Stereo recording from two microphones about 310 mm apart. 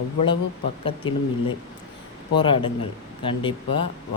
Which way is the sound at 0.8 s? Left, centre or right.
Centre.